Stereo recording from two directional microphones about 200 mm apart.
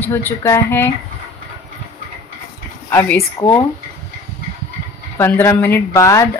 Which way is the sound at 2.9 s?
10° left (ahead or behind).